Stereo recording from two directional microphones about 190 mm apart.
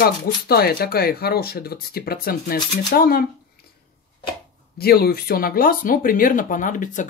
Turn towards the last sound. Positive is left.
turn(degrees=40)  # may be behind; listen again after turning